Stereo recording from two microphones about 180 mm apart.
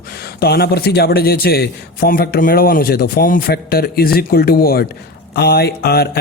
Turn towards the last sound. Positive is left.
turn(degrees=60)  # may be behind; listen again after turning